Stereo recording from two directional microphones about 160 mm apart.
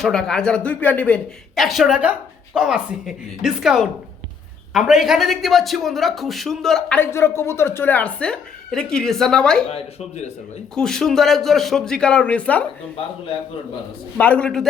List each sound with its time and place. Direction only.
0.0 s a man's voice: 5° left (ahead or behind)
9.6 s speech: 40° left (ahead or behind)
10.8 s a man's voice: 5° left (ahead or behind)
14.2 s a man's voice: 10° left (ahead or behind)